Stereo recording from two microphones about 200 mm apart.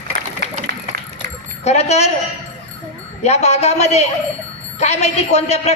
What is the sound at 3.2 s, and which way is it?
A woman's voice, 35° left (ahead or behind).